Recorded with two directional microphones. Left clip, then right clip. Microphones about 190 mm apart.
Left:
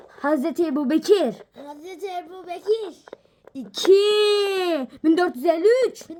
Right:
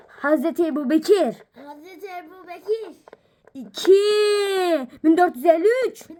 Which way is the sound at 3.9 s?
Centre (ahead or behind).